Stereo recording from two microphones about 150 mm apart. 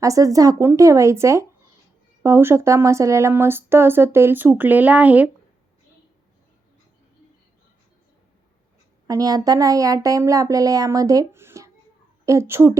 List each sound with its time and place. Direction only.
0.0 s speech: 20° right (ahead or behind)
9.0 s speech: 25° right (ahead or behind)